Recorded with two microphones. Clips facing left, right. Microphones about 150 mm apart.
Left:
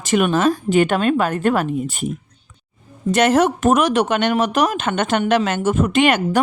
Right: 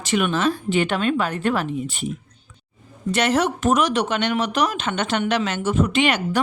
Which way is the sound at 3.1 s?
45° left (ahead or behind).